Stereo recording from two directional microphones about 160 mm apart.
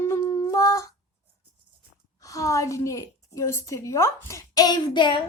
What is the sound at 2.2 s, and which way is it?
Speech, 20° left (ahead or behind).